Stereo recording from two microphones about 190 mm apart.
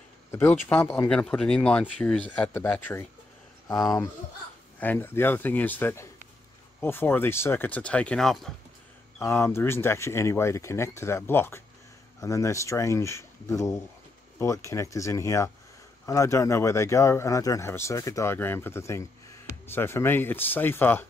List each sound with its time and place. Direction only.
0.3 s speech: 15° left (ahead or behind)
4.7 s speech: 10° left (ahead or behind)
9.2 s speech: 15° left (ahead or behind)